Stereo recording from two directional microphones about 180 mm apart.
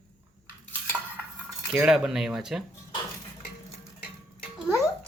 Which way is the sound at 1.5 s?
5° right (ahead or behind).